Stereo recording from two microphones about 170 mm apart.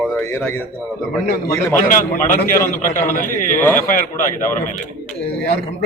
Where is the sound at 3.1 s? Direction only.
55° left (ahead or behind).